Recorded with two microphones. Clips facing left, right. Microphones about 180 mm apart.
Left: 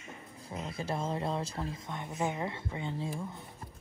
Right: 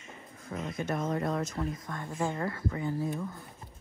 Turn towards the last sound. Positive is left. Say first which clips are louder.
# right 4 dB
turn(degrees=25)  # may be behind; listen again after turning